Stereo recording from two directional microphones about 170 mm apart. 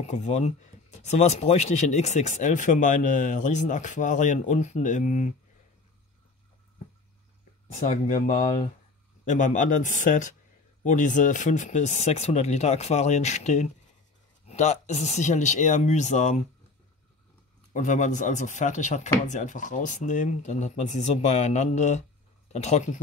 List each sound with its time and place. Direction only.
0.0 s speech: 40° left (ahead or behind)
7.8 s speech: 50° left (ahead or behind)
17.7 s speech: 45° left (ahead or behind)